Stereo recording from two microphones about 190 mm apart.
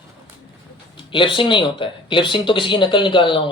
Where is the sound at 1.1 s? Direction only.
25° left (ahead or behind).